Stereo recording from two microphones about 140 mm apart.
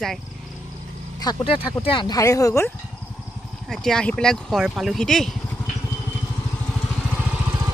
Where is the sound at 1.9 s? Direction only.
35° left (ahead or behind).